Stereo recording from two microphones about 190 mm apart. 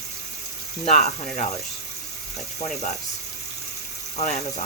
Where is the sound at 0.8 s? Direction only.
40° left (ahead or behind).